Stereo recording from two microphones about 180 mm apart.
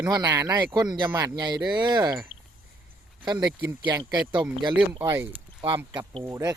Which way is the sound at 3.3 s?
20° right (ahead or behind).